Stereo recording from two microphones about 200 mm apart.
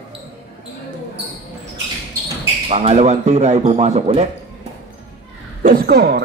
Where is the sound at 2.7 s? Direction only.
30° right (ahead or behind).